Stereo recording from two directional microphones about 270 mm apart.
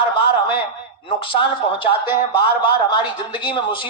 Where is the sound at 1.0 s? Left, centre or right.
Centre.